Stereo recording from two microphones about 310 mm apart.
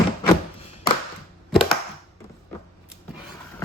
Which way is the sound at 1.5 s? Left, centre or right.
Centre.